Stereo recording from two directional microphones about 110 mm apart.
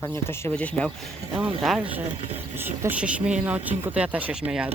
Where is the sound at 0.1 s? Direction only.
20° left (ahead or behind).